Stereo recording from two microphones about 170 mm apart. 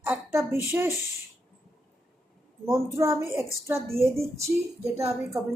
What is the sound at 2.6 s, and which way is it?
A woman's voice, 15° right (ahead or behind).